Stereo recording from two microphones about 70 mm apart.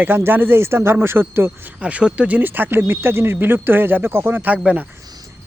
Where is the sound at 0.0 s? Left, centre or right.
Right.